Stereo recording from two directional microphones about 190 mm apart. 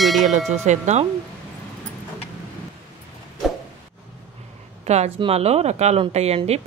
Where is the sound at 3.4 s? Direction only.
Centre (ahead or behind).